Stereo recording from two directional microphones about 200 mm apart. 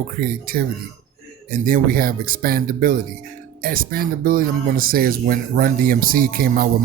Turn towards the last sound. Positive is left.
turn(degrees=-45)  # may be behind; listen again after turning